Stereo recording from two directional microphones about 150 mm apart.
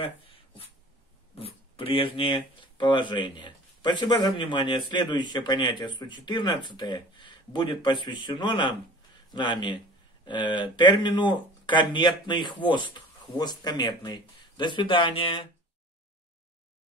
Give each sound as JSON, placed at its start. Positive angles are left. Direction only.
{"t": 1.4, "sound": "speech", "side_deg": 40}